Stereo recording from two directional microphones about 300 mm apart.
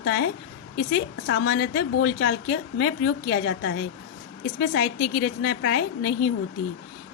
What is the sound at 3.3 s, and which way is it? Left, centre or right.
A woman's voice, left.